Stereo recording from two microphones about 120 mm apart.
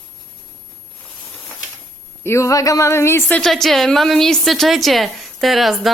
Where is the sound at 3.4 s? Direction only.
Centre (ahead or behind).